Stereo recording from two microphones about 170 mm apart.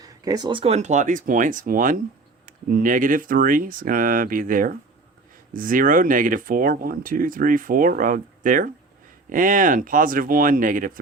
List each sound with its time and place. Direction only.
0.0 s speech: 25° right (ahead or behind); by 11.0 s 50° right (ahead or behind)